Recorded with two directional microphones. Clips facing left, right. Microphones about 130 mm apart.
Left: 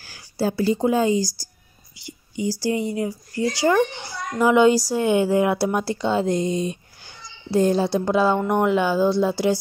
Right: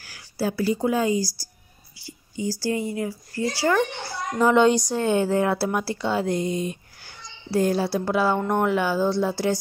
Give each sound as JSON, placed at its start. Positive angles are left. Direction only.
{"t": 0.0, "sound": "speech", "side_deg": 30}
{"t": 2.0, "sound": "a sound", "side_deg": 15}
{"t": 2.6, "sound": "speech", "side_deg": 20}
{"t": 4.4, "sound": "speech", "side_deg": 5}